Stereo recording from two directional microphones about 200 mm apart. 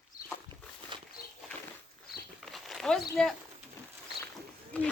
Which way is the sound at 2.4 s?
Centre (ahead or behind).